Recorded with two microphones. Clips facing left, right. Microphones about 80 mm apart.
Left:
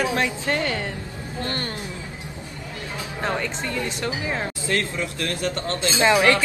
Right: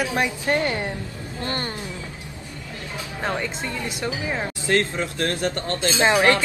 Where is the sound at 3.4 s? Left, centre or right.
Centre.